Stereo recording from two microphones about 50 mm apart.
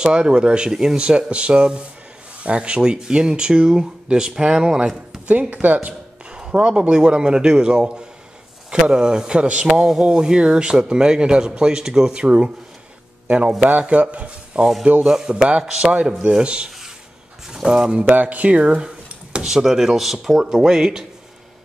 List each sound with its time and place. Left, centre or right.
0.0 s speech: centre
5.3 s speech: right
6.3 s speech: centre
13.7 s speech: right; by 15.9 s centre
15.9 s speech: right
17.6 s speech: centre
18.0 s speech: right
19.3 s speech: centre